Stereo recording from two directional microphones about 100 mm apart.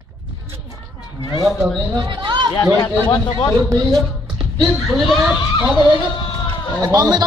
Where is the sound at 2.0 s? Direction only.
50° right (ahead or behind).